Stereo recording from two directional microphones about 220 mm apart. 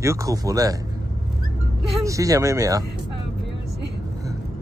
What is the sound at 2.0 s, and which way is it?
Speech, 15° right (ahead or behind).